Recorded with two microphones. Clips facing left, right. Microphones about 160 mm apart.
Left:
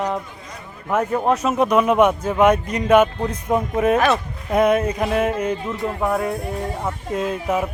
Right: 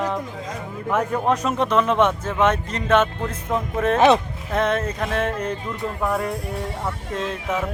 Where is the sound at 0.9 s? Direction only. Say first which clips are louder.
Left 2 dB; 5° left (ahead or behind).